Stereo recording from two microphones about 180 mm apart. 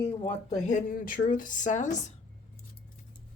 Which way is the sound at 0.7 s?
50° left (ahead or behind).